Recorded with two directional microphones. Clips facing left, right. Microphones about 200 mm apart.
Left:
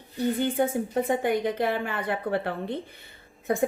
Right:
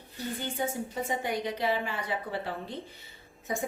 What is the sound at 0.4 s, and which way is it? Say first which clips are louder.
A woman's voice: left 8 dB; 55° left (ahead or behind).